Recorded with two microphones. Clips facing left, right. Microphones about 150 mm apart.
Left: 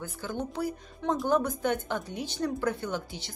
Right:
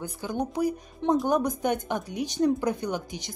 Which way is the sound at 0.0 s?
15° right (ahead or behind).